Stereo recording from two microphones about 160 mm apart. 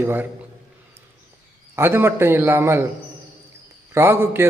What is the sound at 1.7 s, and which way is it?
A man's voice, 15° right (ahead or behind).